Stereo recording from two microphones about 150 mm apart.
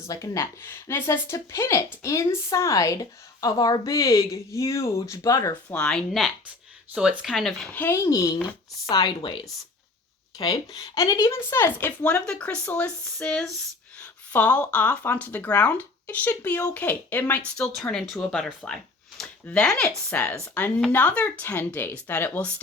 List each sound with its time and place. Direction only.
0.0 s a woman's voice: 20° left (ahead or behind)
5.6 s speech: 5° left (ahead or behind)
8.9 s a woman's voice: 30° left (ahead or behind); by 22.6 s 10° left (ahead or behind)